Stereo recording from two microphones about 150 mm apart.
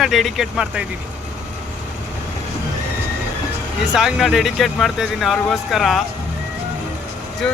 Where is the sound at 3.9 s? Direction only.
5° right (ahead or behind).